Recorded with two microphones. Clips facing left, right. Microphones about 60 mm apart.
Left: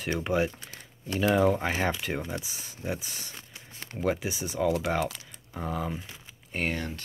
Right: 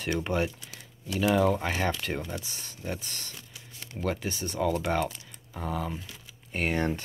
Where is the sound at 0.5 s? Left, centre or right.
Left.